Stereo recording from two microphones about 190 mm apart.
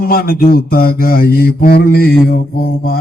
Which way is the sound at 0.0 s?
50° left (ahead or behind).